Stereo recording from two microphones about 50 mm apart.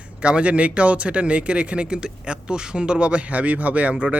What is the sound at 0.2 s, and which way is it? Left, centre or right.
A man's voice, right.